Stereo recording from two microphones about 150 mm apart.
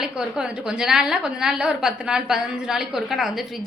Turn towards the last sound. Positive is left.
turn(degrees=0)  # may be behind; listen again after turning